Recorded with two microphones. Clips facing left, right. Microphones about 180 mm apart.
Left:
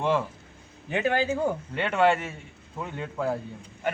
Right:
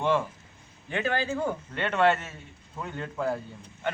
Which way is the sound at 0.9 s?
15° left (ahead or behind).